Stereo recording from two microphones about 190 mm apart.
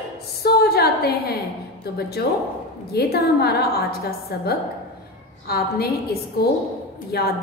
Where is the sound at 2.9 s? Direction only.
55° left (ahead or behind).